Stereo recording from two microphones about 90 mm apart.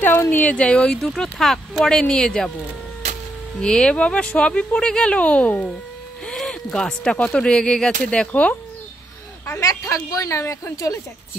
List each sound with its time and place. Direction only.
0.0 s speech: 25° left (ahead or behind); by 2.5 s 5° left (ahead or behind)
3.5 s speech: 5° left (ahead or behind)
9.5 s a woman's voice: 35° left (ahead or behind)